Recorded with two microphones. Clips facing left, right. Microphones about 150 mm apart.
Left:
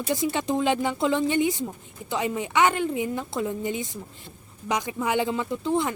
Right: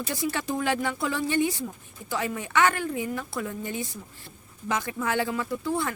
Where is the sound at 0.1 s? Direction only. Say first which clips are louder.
Left 5 dB; 20° left (ahead or behind).